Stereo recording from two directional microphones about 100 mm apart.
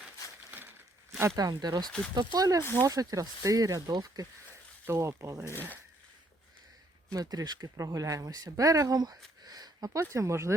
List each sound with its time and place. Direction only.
1.4 s speech: 40° right (ahead or behind)
4.9 s speech: 30° right (ahead or behind)
7.1 s speech: 40° right (ahead or behind)